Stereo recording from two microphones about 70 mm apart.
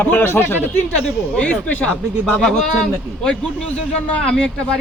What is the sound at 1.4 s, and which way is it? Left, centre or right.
Speech, left.